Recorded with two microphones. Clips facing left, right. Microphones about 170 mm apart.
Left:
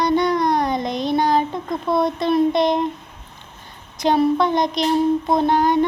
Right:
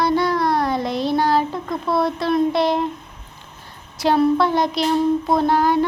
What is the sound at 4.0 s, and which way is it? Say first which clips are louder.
Speech: even; 5° right (ahead or behind).